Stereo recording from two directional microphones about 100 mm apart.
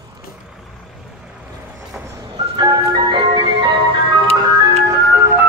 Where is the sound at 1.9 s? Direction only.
20° right (ahead or behind).